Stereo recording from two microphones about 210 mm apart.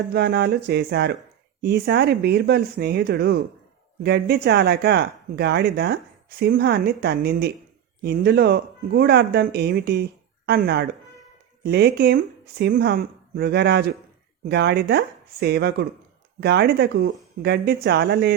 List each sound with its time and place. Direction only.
0.1 s speech: 50° right (ahead or behind)